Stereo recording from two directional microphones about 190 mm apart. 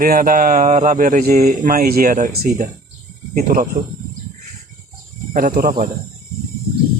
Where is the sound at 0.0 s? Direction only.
50° right (ahead or behind).